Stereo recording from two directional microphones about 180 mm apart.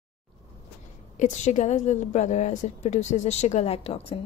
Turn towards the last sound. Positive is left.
turn(degrees=35)  # may be behind; listen again after turning